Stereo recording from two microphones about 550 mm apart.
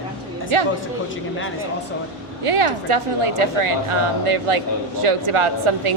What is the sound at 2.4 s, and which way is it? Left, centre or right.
A woman's voice, right.